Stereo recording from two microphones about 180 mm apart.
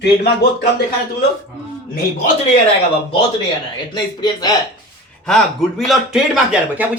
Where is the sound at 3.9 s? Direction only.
25° left (ahead or behind).